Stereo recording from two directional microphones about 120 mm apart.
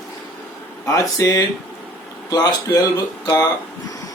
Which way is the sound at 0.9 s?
25° left (ahead or behind).